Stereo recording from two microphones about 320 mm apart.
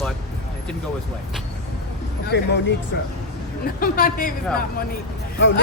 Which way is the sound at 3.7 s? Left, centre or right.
Left.